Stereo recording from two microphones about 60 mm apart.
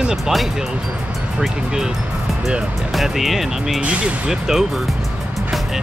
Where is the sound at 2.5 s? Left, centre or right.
Centre.